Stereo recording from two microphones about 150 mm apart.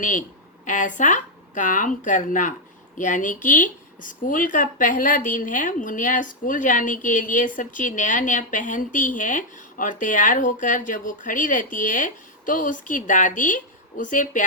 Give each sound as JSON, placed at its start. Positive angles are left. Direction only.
{"t": 0.0, "sound": "speech", "side_deg": 60}